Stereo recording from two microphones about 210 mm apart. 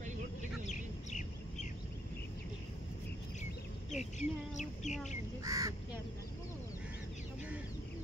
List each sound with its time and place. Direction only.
0.7 s bird: 35° left (ahead or behind)
3.9 s speech: 35° left (ahead or behind)
5.4 s speech: 15° right (ahead or behind)